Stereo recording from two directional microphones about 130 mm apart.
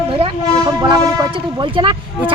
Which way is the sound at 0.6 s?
30° right (ahead or behind).